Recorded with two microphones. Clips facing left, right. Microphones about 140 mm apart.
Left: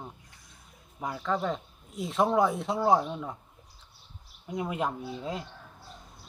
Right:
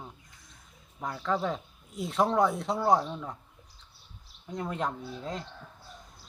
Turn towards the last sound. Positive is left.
turn(degrees=5)  # may be behind; listen again after turning